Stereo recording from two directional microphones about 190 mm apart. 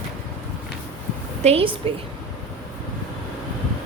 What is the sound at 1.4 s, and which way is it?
Speech, 30° right (ahead or behind).